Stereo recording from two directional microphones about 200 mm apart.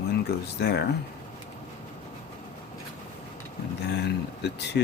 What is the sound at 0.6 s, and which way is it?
Speech, 55° left (ahead or behind).